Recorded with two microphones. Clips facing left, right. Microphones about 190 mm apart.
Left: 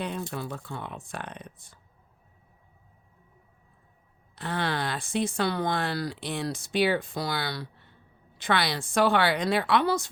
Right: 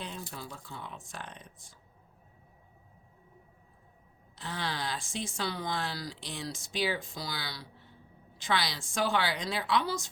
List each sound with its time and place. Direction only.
0.0 s speech: 60° left (ahead or behind)
4.4 s speech: 60° left (ahead or behind)